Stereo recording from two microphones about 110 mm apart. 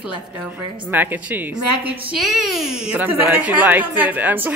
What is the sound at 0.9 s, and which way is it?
Speech, 15° right (ahead or behind).